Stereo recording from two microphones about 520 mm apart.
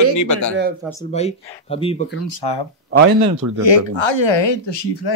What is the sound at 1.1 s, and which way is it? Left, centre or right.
Speech, centre.